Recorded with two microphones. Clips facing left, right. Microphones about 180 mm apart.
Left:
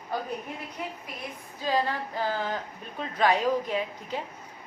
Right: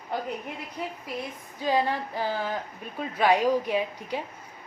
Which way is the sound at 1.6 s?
15° right (ahead or behind).